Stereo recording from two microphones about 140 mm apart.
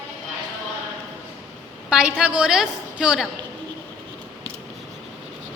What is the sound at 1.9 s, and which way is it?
A woman's voice, 5° right (ahead or behind).